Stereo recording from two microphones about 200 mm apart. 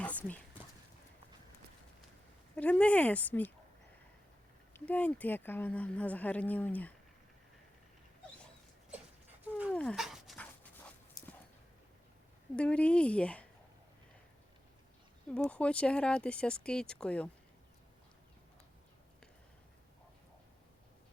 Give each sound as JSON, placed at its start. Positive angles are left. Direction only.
{"t": 0.0, "sound": "a sound", "side_deg": 5}
{"t": 2.6, "sound": "speech", "side_deg": 5}
{"t": 4.7, "sound": "speech", "side_deg": 5}
{"t": 9.7, "sound": "dog", "side_deg": 0}
{"t": 11.2, "sound": "dog", "side_deg": 20}
{"t": 12.5, "sound": "speech", "side_deg": 5}
{"t": 15.3, "sound": "speech", "side_deg": 5}